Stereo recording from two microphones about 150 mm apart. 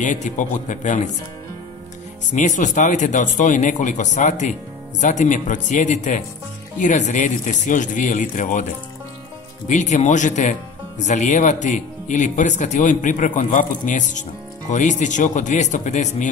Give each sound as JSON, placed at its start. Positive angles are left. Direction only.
{"t": 0.0, "sound": "a man's voice", "side_deg": 55}
{"t": 2.3, "sound": "a man's voice", "side_deg": 55}
{"t": 9.7, "sound": "a man's voice", "side_deg": 55}